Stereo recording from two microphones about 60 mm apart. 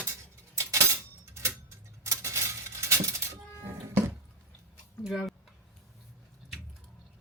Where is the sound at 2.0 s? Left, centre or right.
Right.